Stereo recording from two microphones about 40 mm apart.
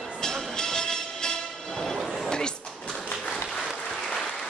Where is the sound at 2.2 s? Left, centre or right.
Centre.